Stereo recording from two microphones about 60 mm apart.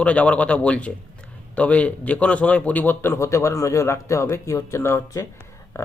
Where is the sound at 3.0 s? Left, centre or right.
Left.